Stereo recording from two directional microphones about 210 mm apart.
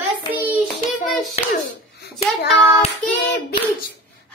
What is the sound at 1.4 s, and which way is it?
Speech, 30° left (ahead or behind).